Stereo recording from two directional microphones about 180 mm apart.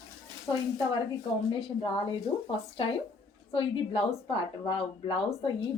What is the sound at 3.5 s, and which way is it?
A woman's voice, 30° left (ahead or behind).